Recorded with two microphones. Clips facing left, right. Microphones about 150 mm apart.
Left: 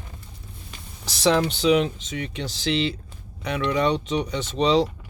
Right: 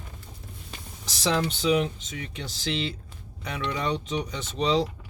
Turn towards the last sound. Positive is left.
turn(degrees=80)